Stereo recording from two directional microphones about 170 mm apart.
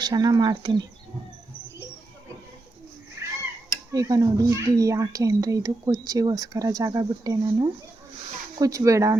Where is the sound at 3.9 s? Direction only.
20° right (ahead or behind).